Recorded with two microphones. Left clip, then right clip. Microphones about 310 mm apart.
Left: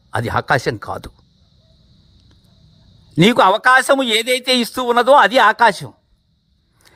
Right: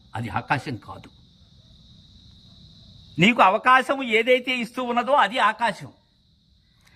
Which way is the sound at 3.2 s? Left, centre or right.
Left.